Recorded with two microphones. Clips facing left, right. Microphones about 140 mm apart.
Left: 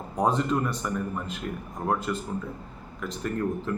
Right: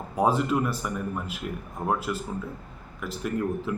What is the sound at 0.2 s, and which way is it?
A man's voice, 5° right (ahead or behind).